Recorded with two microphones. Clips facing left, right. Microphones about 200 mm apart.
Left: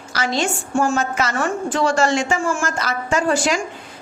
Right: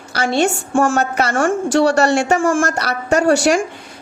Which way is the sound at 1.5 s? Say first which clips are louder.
Right 5 dB; 80° right.